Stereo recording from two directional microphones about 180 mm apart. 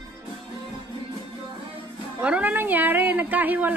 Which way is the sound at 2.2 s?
5° right (ahead or behind).